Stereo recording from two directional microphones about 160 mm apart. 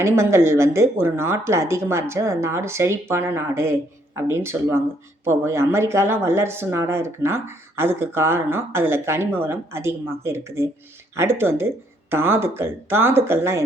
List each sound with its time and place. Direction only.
0.0 s speech: 15° right (ahead or behind)